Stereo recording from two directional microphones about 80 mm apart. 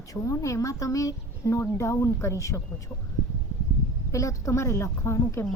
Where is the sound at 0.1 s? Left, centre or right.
Left.